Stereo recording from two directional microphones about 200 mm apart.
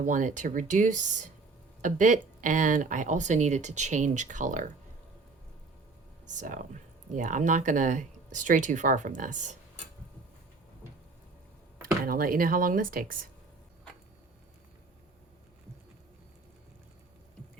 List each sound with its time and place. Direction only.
0.0 s speech: 40° right (ahead or behind)
6.2 s speech: 40° right (ahead or behind)
12.0 s speech: 45° right (ahead or behind)